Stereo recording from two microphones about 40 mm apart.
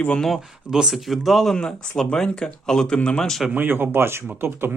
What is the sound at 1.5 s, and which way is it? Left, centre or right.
Speech, centre.